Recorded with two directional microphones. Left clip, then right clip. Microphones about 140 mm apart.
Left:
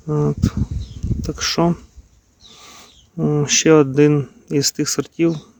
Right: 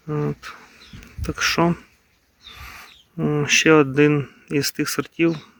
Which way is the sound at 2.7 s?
30° left (ahead or behind).